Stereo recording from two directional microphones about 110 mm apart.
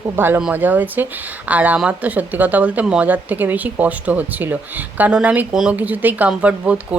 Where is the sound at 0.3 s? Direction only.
15° right (ahead or behind).